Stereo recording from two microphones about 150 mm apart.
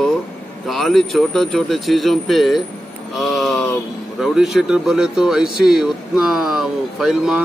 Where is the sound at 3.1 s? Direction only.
Centre (ahead or behind).